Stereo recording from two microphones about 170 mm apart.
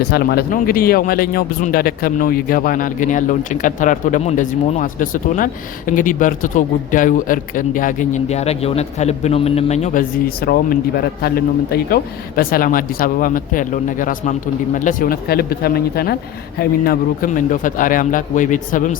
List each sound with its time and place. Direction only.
0.0 s speech: 65° left (ahead or behind); by 18.9 s 50° left (ahead or behind)